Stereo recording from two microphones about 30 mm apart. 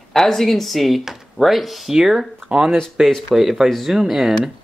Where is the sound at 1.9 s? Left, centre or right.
Centre.